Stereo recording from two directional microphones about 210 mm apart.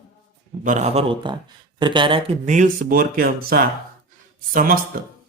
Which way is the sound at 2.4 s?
35° right (ahead or behind).